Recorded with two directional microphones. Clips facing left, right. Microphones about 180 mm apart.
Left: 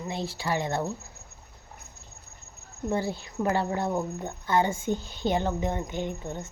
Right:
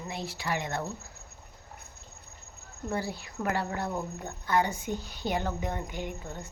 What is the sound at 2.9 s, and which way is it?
A woman's voice, 25° left (ahead or behind).